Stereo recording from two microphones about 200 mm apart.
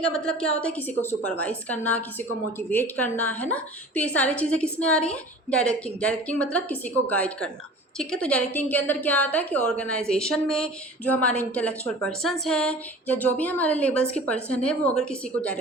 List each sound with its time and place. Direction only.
0.0 s a woman's voice: 5° left (ahead or behind)